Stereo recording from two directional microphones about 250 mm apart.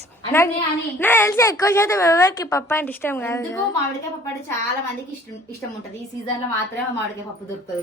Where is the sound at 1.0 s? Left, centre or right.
Centre.